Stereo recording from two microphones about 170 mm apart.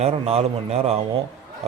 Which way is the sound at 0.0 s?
40° right (ahead or behind).